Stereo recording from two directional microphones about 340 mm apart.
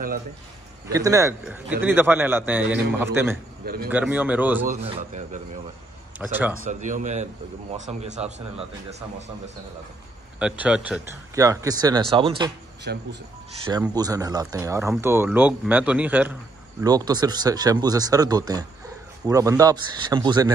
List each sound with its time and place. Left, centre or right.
0.8 s speech: centre
3.6 s speech: right
3.9 s speech: centre
4.6 s speech: centre
6.2 s speech: centre
6.6 s speech: right
10.4 s speech: centre
12.9 s speech: right
13.7 s speech: centre